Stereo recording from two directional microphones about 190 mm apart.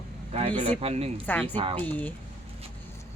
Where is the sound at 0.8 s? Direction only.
30° right (ahead or behind).